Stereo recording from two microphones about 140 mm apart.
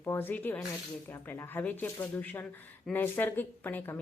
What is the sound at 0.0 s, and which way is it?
Speech, 15° left (ahead or behind).